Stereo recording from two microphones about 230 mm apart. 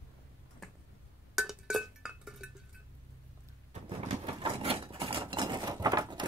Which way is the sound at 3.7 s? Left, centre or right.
Right.